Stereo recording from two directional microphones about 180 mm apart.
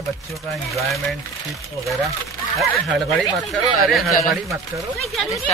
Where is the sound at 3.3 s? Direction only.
Centre (ahead or behind).